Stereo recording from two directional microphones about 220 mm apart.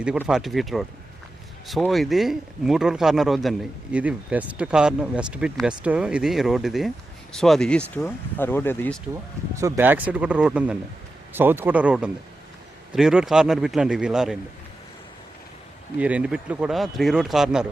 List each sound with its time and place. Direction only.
0.2 s speech: centre (ahead or behind)
9.6 s speech: 10° right (ahead or behind)
16.0 s speech: 5° right (ahead or behind)